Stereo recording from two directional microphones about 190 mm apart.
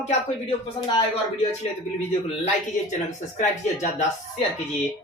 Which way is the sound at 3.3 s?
40° left (ahead or behind).